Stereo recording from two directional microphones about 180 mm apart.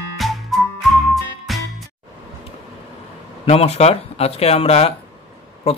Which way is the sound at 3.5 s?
35° left (ahead or behind).